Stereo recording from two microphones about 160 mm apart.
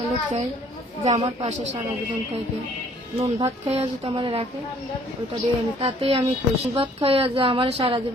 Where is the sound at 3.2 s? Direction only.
35° right (ahead or behind).